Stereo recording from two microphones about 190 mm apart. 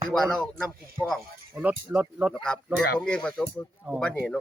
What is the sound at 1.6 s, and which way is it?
Speech, 10° right (ahead or behind).